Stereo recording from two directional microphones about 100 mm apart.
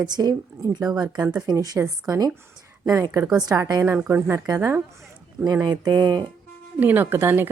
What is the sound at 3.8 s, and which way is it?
Speech, 20° right (ahead or behind).